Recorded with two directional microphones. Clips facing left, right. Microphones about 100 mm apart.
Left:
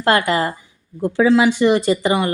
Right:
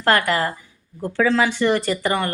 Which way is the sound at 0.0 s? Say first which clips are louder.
Left 2 dB; 20° left (ahead or behind).